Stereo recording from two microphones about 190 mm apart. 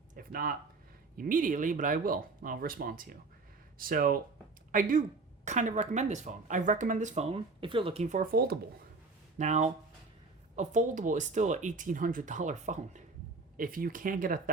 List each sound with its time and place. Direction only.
0.2 s speech: 50° right (ahead or behind); by 8.2 s 30° right (ahead or behind)
8.2 s speech: 50° right (ahead or behind)
9.4 s speech: 40° right (ahead or behind)